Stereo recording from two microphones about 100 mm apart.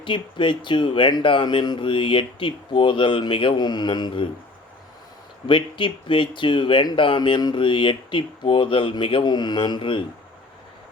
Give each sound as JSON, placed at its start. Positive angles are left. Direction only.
{"t": 0.0, "sound": "speech", "side_deg": 55}
{"t": 5.5, "sound": "speech", "side_deg": 60}